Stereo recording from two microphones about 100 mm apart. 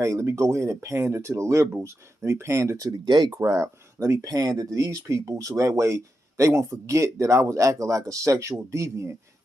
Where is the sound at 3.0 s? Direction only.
45° right (ahead or behind); by 9.1 s 30° right (ahead or behind).